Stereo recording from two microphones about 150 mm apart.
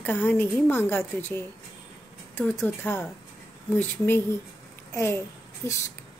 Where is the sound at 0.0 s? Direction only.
10° left (ahead or behind).